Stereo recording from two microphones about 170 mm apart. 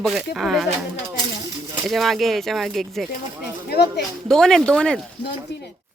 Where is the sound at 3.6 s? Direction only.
70° left (ahead or behind).